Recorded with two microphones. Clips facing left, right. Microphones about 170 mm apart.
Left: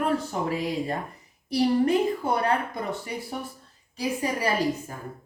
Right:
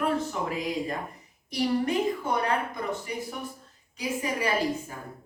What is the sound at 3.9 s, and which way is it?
A woman's voice, 35° left (ahead or behind).